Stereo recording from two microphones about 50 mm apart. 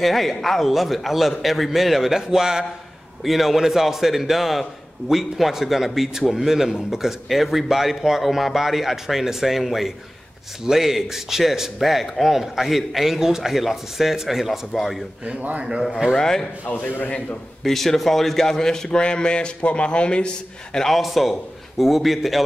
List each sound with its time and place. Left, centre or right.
0.0 s a man's voice: centre
15.2 s speech: right
16.2 s speech: centre
16.6 s a man's voice: left
17.6 s a man's voice: centre; by 20.2 s left
20.7 s a man's voice: centre